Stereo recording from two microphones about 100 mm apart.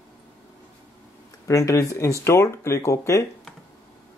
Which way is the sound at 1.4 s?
30° left (ahead or behind).